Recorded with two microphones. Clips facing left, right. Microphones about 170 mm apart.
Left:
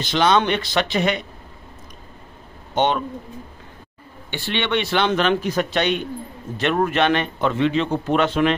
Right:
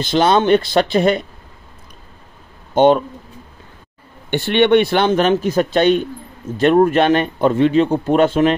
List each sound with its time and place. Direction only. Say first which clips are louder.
0.1 s speech: right 5 dB; 35° right (ahead or behind)
4.3 s a man's voice: right 11 dB; 55° right (ahead or behind)